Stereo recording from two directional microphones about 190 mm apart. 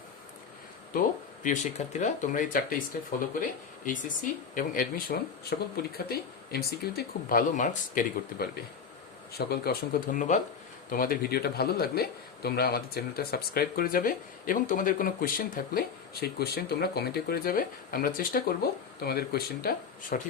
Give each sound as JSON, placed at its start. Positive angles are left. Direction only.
{"t": 1.4, "sound": "speech", "side_deg": 40}
{"t": 9.5, "sound": "speech", "side_deg": 50}